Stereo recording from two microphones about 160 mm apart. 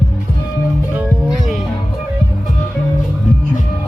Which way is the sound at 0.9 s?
5° right (ahead or behind).